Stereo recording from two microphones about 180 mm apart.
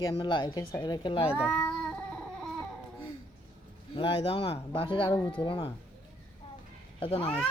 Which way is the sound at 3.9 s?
30° left (ahead or behind).